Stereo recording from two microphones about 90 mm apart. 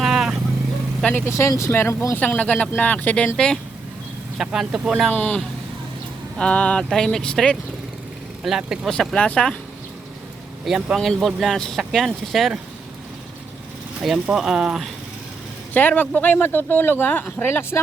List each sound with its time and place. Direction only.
0.0 s vehicle: 5° right (ahead or behind)
1.3 s speech: 35° left (ahead or behind); by 3.3 s 20° left (ahead or behind)
3.3 s speech: 10° left (ahead or behind)
4.4 s speech: 5° right (ahead or behind)
5.1 s speech: 20° left (ahead or behind)
6.4 s speech: 15° left (ahead or behind)
8.4 s speech: 5° right (ahead or behind)
8.9 s speech: 10° left (ahead or behind)
10.9 s speech: 5° left (ahead or behind)
14.0 s speech: 5° right (ahead or behind)
15.7 s speech: 20° left (ahead or behind)